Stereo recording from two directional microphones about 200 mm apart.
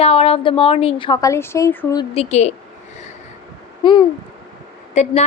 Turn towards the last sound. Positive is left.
turn(degrees=35)  # may be behind; listen again after turning